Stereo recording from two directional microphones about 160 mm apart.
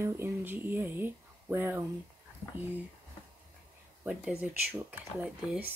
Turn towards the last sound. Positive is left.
turn(degrees=-10)  # may be behind; listen again after turning